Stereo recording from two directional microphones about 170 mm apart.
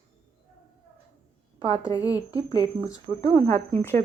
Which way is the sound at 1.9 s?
25° left (ahead or behind).